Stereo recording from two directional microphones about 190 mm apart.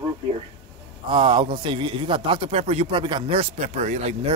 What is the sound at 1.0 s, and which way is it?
A man's voice, 25° right (ahead or behind).